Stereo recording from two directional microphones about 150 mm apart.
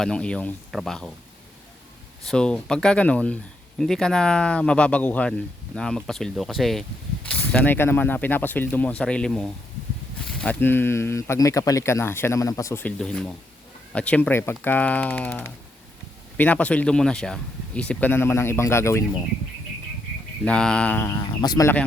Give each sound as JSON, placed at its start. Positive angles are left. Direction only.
{"t": 0.0, "sound": "speech", "side_deg": 5}
{"t": 2.2, "sound": "speech", "side_deg": 5}
{"t": 13.0, "sound": "speech", "side_deg": 5}
{"t": 20.4, "sound": "speech", "side_deg": 5}
{"t": 21.4, "sound": "speech", "side_deg": 25}